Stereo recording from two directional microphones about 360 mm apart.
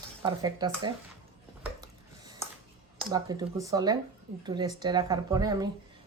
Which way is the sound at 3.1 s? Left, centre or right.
Centre.